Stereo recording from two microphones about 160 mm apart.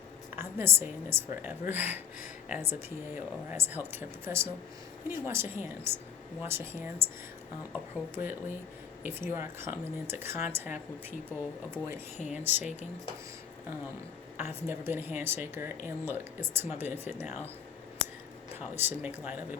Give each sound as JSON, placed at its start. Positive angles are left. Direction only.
{"t": 0.3, "sound": "speech", "side_deg": -15}
{"t": 12.1, "sound": "speech", "side_deg": 45}
{"t": 12.4, "sound": "speech", "side_deg": -10}
{"t": 14.3, "sound": "speech", "side_deg": -15}
{"t": 18.8, "sound": "speech", "side_deg": -10}